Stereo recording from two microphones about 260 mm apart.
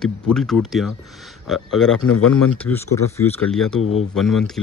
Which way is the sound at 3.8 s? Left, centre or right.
Left.